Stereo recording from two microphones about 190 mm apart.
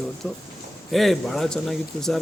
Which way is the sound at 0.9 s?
Centre (ahead or behind).